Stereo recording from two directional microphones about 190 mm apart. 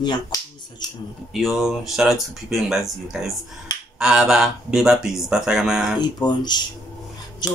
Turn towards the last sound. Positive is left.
turn(degrees=20)  # may be behind; listen again after turning